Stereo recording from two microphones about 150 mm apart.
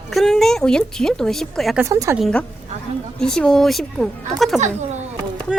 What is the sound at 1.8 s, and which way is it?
Speech, 20° right (ahead or behind).